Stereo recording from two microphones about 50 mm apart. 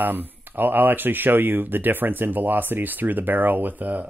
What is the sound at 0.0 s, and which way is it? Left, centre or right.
Speech, right.